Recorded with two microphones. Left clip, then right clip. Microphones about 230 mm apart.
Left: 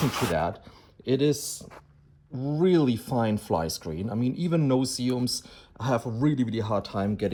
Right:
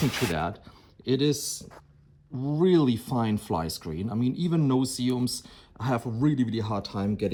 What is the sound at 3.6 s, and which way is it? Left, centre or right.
Speech, left.